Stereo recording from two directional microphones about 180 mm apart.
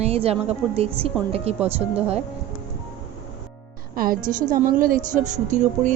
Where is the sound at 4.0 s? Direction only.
50° right (ahead or behind).